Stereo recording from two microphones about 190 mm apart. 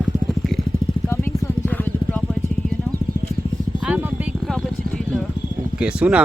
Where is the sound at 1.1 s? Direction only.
10° left (ahead or behind).